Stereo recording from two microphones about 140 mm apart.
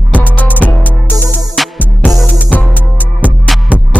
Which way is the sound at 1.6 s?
Centre (ahead or behind).